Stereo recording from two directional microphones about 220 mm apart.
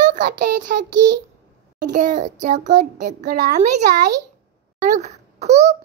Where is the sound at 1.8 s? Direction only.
35° right (ahead or behind).